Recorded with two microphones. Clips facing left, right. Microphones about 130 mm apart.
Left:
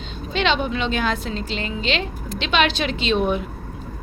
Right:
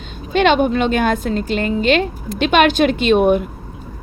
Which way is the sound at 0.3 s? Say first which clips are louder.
Right 8 dB; 50° right (ahead or behind).